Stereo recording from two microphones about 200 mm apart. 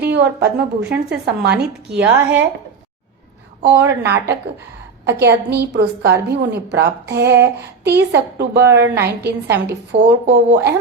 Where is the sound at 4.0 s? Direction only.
55° right (ahead or behind).